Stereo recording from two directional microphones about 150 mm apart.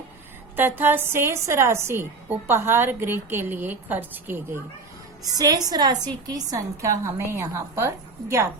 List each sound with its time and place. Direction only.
0.5 s a woman's voice: 15° right (ahead or behind)
5.3 s a woman's voice: 25° right (ahead or behind)